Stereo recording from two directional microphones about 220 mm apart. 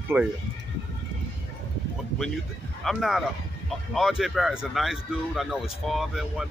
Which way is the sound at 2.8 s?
Centre (ahead or behind).